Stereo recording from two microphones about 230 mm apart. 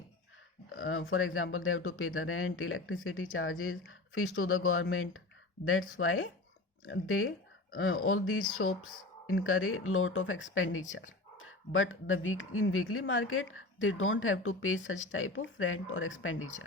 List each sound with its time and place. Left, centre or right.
0.8 s speech: left